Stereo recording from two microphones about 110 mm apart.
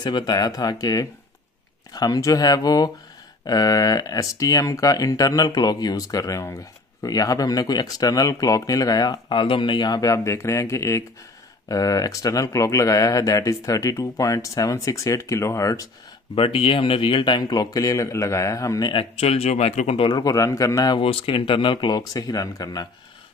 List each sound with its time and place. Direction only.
0.0 s speech: 40° left (ahead or behind)
16.3 s speech: 55° left (ahead or behind); by 18.9 s 35° left (ahead or behind)
18.9 s speech: 65° left (ahead or behind)
20.0 s speech: 40° left (ahead or behind)
21.0 s speech: 55° left (ahead or behind); by 22.8 s 35° left (ahead or behind)